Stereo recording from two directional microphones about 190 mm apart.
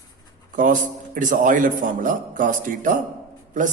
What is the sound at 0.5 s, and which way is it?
A man's voice, 45° right (ahead or behind).